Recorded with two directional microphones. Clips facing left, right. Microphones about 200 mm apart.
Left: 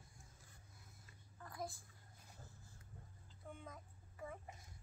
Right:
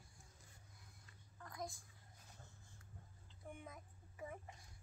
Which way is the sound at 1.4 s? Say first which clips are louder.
Left 1 dB; 5° left (ahead or behind).